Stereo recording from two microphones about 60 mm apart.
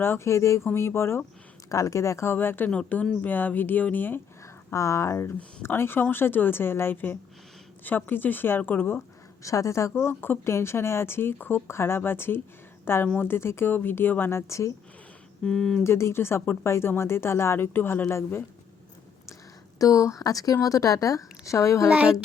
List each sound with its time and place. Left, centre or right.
0.3 s speech: left
1.7 s speech: left
2.3 s speech: left
2.6 s speech: left
4.7 s speech: left
5.6 s speech: left
9.4 s speech: left
9.9 s a woman's voice: left
15.4 s speech: centre
15.8 s speech: left
19.8 s speech: left
21.8 s speech: right